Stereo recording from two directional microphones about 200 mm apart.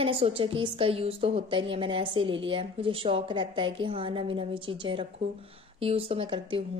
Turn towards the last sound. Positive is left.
turn(degrees=-25)  # may be behind; listen again after turning